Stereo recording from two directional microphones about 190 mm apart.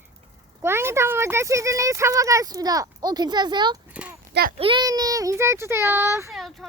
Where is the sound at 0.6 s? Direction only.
15° right (ahead or behind).